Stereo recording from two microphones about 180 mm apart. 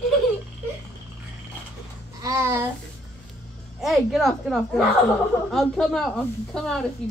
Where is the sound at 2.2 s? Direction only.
15° right (ahead or behind).